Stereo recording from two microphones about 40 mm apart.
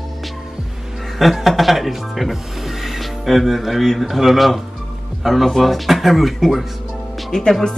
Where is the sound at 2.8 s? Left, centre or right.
Centre.